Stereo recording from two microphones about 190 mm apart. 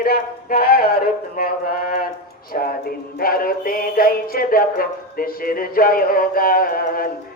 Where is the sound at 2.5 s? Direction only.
45° left (ahead or behind).